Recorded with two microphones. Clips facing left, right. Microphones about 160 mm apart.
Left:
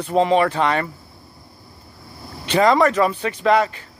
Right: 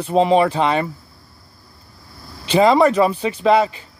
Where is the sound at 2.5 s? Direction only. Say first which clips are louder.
Right 2 dB; 25° right (ahead or behind).